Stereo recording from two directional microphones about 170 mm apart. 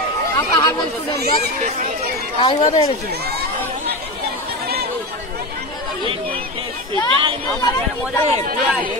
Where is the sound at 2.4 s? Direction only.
35° left (ahead or behind).